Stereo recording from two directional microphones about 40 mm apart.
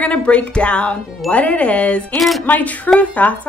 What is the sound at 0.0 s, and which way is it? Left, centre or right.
A woman's voice, left.